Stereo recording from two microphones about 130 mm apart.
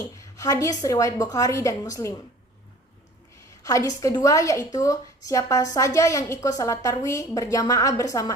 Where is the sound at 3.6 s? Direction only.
25° left (ahead or behind).